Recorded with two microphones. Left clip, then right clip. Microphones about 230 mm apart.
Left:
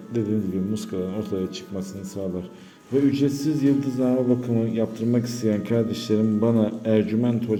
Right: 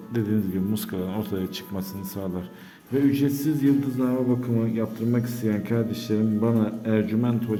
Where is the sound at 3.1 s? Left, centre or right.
Centre.